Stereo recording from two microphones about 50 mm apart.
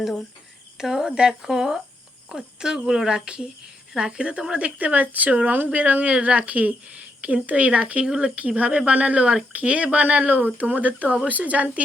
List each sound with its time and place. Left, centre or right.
0.8 s a woman's voice: centre; by 11.8 s right